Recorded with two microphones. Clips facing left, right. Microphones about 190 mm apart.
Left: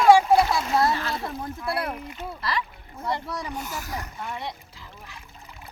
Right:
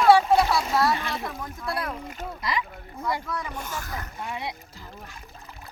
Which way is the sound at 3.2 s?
35° left (ahead or behind).